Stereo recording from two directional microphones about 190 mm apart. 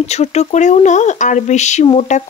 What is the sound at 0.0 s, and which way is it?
Speech, 35° left (ahead or behind).